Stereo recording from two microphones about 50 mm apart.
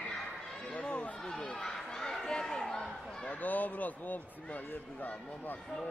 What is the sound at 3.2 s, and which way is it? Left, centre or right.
Speech, left.